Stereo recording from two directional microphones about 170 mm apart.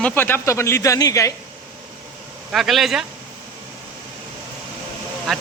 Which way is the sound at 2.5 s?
Centre (ahead or behind).